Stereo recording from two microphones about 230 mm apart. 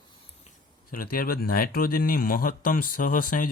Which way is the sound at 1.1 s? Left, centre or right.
Left.